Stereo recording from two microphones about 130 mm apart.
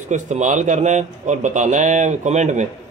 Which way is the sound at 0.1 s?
65° right (ahead or behind).